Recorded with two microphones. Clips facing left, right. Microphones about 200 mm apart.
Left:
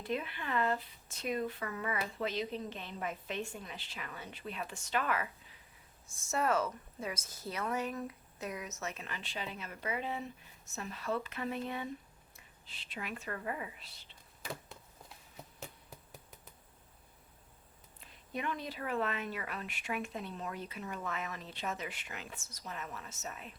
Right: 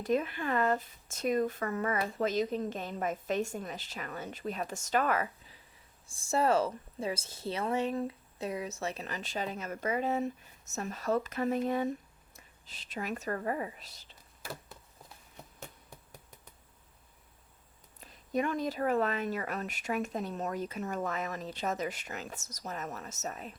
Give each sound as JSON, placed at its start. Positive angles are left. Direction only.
{"t": 0.0, "sound": "a woman's voice", "side_deg": -45}
{"t": 15.4, "sound": "insect", "side_deg": 0}
{"t": 18.0, "sound": "speech", "side_deg": -40}